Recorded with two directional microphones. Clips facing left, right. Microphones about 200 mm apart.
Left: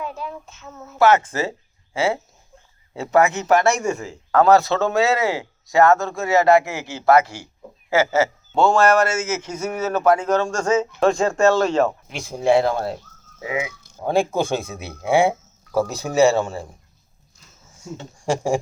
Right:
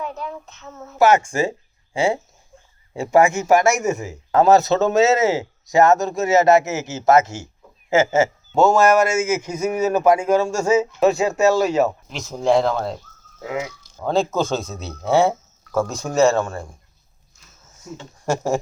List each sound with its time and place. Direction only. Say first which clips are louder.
0.0 s child singing: right 1 dB; 5° left (ahead or behind)
0.9 s a man's voice: right 1 dB; 15° right (ahead or behind)
8.5 s a man's voice: right 1 dB; 10° right (ahead or behind)
12.0 s speech: even; 10° left (ahead or behind)
14.0 s speech: even; 15° left (ahead or behind)
16.0 s child singing: even; 10° left (ahead or behind)
18.0 s speech: even; 15° left (ahead or behind)